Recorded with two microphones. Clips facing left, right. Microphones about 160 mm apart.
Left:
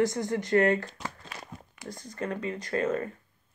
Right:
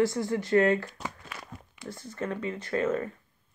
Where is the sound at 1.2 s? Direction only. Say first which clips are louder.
Even; 40° left (ahead or behind).